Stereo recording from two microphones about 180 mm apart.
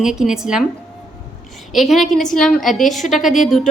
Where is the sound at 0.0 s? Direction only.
5° right (ahead or behind).